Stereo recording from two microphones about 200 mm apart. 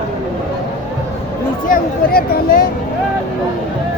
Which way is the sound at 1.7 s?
50° left (ahead or behind).